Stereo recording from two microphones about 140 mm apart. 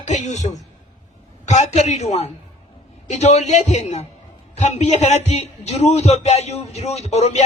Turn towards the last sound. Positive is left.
turn(degrees=50)  # may be behind; listen again after turning